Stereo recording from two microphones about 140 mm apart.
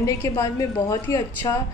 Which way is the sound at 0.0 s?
20° left (ahead or behind).